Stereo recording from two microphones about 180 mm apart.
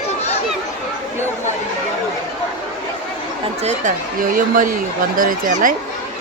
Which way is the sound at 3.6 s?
40° right (ahead or behind).